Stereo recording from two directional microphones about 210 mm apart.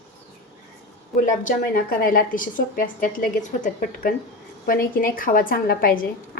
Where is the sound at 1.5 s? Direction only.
45° left (ahead or behind).